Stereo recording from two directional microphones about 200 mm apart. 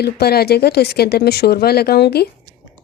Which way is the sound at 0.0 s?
50° left (ahead or behind).